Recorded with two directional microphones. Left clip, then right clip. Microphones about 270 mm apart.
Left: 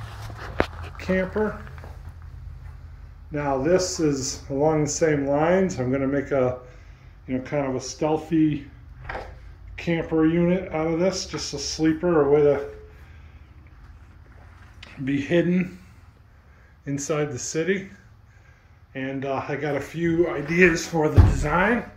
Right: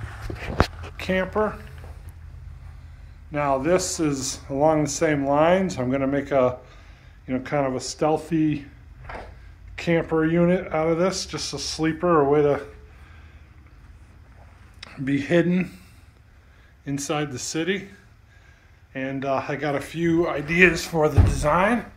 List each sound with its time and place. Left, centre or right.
0.9 s a sound: centre
3.3 s a man's voice: centre
4.5 s speech: centre
9.8 s speech: centre
14.8 s speech: centre
16.8 s speech: centre
18.9 s speech: centre